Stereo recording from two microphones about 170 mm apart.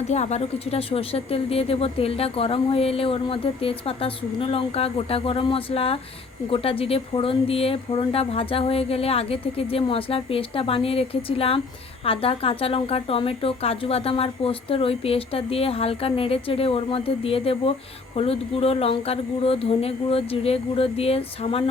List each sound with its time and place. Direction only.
0.1 s speech: 40° left (ahead or behind)